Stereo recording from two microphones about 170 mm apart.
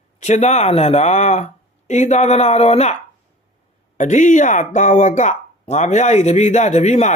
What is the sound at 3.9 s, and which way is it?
Speech, 45° left (ahead or behind).